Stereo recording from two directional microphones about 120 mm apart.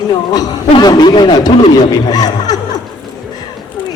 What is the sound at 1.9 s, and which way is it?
Snicker, 35° left (ahead or behind).